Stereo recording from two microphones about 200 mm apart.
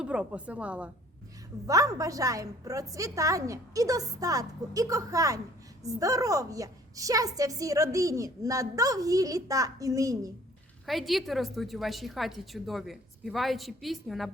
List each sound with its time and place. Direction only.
0.0 s a woman's voice: 5° right (ahead or behind)
1.6 s a woman's voice: 15° right (ahead or behind)
10.8 s a woman's voice: centre (ahead or behind)